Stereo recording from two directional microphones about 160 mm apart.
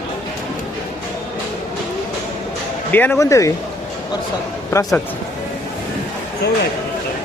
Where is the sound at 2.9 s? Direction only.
10° left (ahead or behind).